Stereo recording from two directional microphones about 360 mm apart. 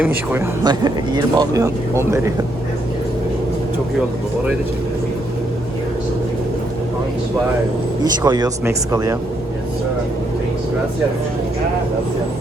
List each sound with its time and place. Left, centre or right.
0.0 s speech: centre
8.2 s speech: centre